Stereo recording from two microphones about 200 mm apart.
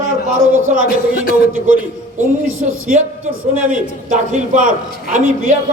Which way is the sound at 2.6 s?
35° right (ahead or behind).